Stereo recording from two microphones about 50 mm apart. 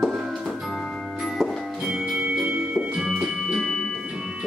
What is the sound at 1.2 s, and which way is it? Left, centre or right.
Music, centre.